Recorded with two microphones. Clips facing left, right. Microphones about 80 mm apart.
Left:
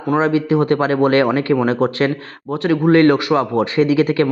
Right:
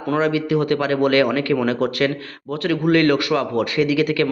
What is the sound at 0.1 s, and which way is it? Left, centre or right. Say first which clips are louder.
Speech: left 3 dB; left.